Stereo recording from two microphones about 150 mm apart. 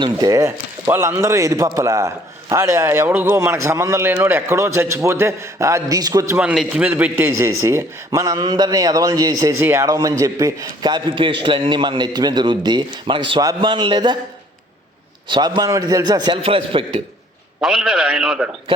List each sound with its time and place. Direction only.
0.0 s a man's voice: 25° right (ahead or behind)
6.4 s a man's voice: 5° right (ahead or behind); by 14.2 s 30° right (ahead or behind)
15.3 s a man's voice: 30° right (ahead or behind)
17.6 s a man's voice: 5° right (ahead or behind)